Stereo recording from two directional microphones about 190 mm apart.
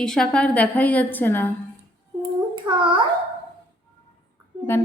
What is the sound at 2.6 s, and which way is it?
Speech, 25° right (ahead or behind).